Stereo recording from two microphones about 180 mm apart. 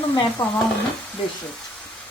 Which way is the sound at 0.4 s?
25° left (ahead or behind).